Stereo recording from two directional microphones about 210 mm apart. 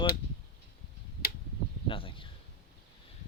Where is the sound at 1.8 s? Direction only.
25° left (ahead or behind).